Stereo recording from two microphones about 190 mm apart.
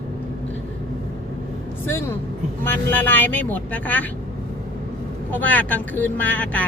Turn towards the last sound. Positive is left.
turn(degrees=10)  # may be behind; listen again after turning